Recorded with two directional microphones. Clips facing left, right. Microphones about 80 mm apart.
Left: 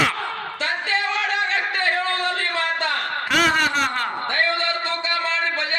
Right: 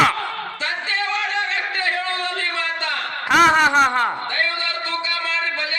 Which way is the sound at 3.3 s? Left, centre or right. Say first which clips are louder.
Right 6 dB; centre.